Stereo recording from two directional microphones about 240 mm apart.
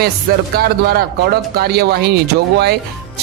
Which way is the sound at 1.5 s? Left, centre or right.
Right.